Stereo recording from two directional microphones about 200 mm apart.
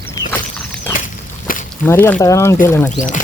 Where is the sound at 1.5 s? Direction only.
45° left (ahead or behind).